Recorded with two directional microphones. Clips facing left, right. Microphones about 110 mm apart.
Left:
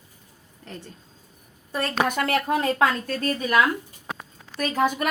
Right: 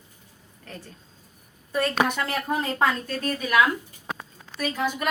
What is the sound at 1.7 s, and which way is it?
Speech, 45° left (ahead or behind).